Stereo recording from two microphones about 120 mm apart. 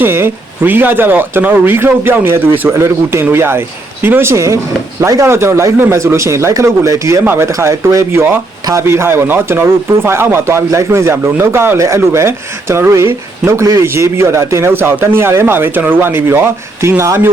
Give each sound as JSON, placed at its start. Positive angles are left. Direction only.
{"t": 0.0, "sound": "a man's voice", "side_deg": -20}